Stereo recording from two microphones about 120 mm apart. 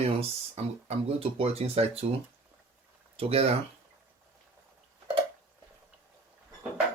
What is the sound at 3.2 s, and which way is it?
Speech, 55° right (ahead or behind).